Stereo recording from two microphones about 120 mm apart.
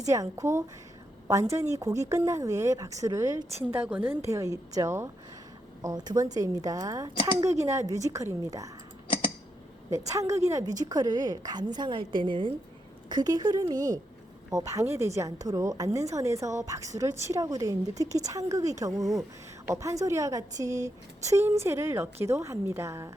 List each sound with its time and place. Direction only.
0.0 s a woman's voice: 30° right (ahead or behind)
3.7 s a woman's voice: 15° right (ahead or behind)
4.3 s a woman's voice: 30° right (ahead or behind)
10.1 s a woman's voice: 25° right (ahead or behind)